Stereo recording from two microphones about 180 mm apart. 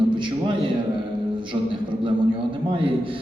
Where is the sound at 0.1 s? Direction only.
25° right (ahead or behind).